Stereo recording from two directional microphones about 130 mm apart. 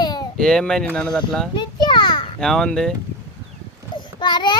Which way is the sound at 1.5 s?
35° left (ahead or behind).